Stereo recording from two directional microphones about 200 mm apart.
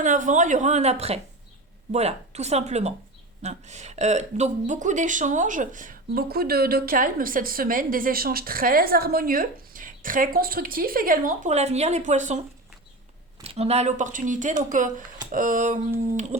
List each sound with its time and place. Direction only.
0.0 s speech: 40° right (ahead or behind)
13.4 s speech: 30° right (ahead or behind)